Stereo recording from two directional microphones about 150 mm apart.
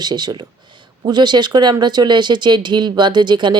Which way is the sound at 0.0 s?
30° right (ahead or behind).